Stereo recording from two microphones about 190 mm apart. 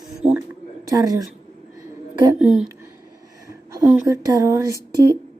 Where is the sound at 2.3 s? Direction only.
5° right (ahead or behind).